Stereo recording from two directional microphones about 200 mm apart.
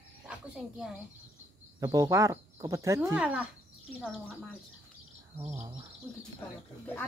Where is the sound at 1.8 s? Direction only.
20° right (ahead or behind).